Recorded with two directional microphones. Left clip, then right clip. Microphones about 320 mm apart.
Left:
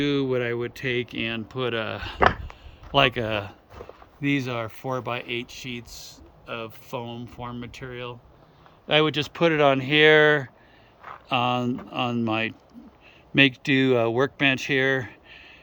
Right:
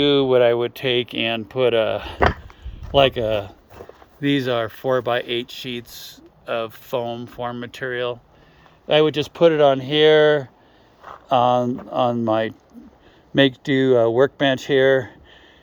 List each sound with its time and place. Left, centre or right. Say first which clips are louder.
0.2 s speech: right 10 dB; centre
0.7 s speech: right 6 dB; centre
3.8 s a sound: right 2 dB; right
4.2 s speech: right 6 dB; centre
8.9 s speech: right 4 dB; centre